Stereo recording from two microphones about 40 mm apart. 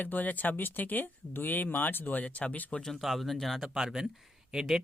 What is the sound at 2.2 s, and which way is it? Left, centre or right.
Speech, left.